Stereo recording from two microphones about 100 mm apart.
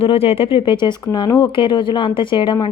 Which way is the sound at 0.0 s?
80° left.